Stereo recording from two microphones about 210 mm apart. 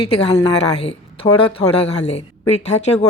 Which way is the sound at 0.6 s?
30° left (ahead or behind).